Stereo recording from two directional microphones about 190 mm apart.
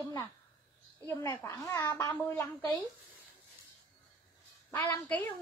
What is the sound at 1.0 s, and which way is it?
A woman's voice, 15° left (ahead or behind).